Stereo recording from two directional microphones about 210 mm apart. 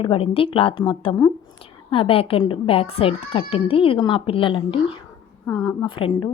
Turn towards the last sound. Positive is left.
turn(degrees=20)  # may be behind; listen again after turning